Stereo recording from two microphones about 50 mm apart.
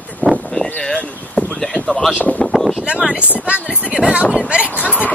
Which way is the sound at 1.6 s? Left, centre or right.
Centre.